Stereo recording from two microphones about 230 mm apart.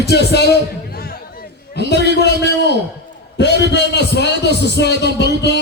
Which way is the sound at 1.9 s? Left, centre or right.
Left.